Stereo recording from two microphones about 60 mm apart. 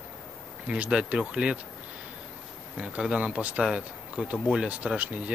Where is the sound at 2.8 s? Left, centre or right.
Centre.